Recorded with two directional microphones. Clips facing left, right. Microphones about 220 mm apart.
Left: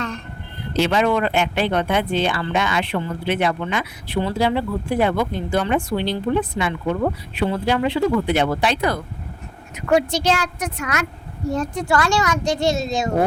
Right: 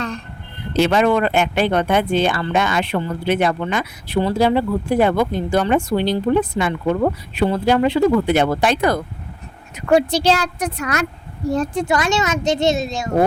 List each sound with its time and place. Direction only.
0.8 s speech: 50° right (ahead or behind)
9.7 s speech: 35° right (ahead or behind)
11.9 s a child's voice: 20° right (ahead or behind)